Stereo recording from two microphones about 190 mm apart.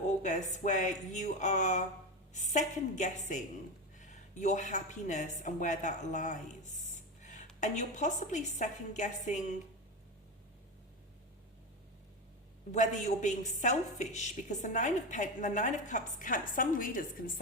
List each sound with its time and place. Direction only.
0.2 s a woman's voice: 40° left (ahead or behind)
6.9 s a sound: 40° left (ahead or behind)
7.6 s a woman's voice: 40° left (ahead or behind)
12.7 s a woman's voice: 40° left (ahead or behind)